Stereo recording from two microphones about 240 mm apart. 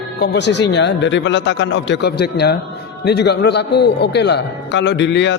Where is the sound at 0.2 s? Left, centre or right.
Left.